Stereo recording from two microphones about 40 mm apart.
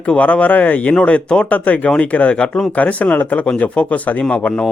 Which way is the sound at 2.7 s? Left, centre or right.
Left.